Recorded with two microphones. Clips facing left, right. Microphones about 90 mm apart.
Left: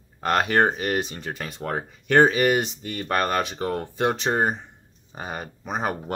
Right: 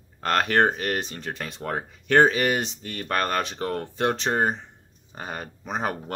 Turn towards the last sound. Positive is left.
turn(degrees=5)  # may be behind; listen again after turning